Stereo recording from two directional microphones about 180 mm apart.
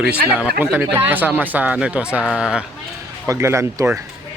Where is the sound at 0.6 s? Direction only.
10° right (ahead or behind).